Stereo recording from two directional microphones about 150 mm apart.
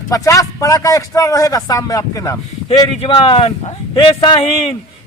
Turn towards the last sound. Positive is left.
turn(degrees=35)  # may be behind; listen again after turning